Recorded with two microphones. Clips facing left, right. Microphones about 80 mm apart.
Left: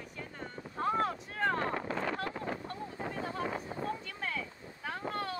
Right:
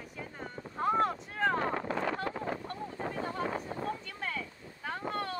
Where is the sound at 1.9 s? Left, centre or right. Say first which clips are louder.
Right 2 dB; right.